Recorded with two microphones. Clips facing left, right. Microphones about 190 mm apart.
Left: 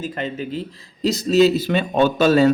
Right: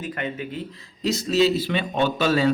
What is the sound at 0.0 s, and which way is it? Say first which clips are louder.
Speech: left 3 dB; 30° left (ahead or behind).